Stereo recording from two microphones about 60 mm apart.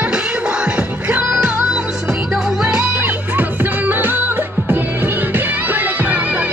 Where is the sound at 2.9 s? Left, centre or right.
Right.